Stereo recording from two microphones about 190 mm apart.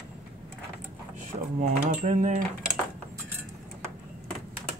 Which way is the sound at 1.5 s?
45° right (ahead or behind).